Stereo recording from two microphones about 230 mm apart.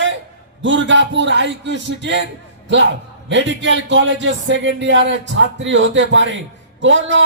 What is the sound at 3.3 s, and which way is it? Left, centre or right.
Speech, right.